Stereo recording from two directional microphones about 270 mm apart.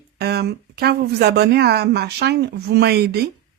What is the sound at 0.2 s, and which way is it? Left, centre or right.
Speech, right.